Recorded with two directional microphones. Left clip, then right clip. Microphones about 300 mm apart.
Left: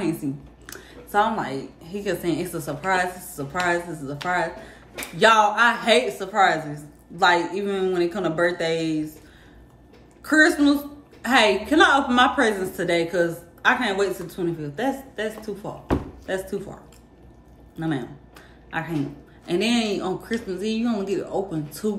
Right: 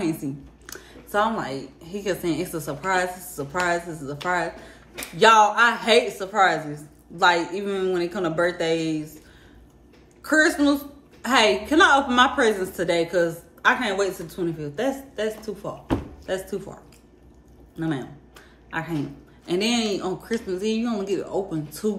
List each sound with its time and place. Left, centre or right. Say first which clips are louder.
0.0 s a woman's voice: left 1 dB; centre
10.2 s a woman's voice: left 2 dB; centre
17.7 s a woman's voice: left 1 dB; centre